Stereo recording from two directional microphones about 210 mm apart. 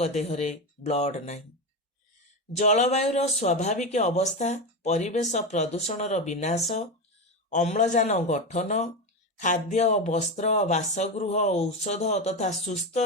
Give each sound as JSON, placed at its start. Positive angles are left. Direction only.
{"t": 0.0, "sound": "speech", "side_deg": 30}
{"t": 2.6, "sound": "speech", "side_deg": 35}